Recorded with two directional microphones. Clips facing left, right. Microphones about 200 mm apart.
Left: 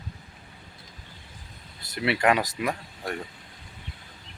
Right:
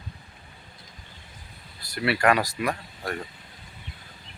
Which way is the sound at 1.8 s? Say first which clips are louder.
Right 1 dB; 20° left (ahead or behind).